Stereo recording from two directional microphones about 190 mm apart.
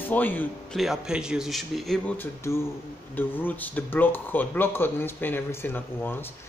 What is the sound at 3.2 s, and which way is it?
Speech, 10° left (ahead or behind).